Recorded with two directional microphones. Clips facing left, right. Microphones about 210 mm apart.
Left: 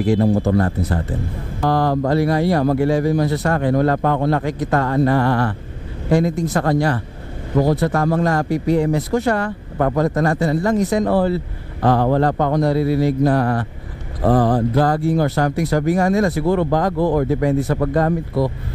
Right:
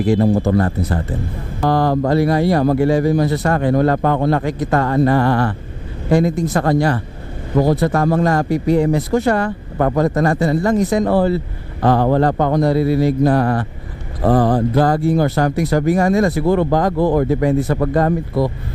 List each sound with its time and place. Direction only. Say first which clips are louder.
0.2 s speech: right 1 dB; 25° right (ahead or behind)